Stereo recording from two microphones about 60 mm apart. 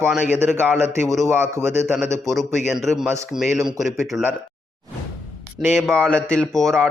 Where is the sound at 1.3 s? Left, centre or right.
Right.